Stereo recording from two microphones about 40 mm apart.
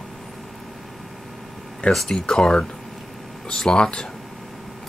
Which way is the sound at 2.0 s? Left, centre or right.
Centre.